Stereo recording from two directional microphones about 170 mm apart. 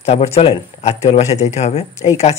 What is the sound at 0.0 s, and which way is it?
Speech, 40° left (ahead or behind).